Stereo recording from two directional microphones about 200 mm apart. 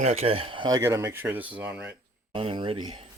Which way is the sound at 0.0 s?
30° right (ahead or behind).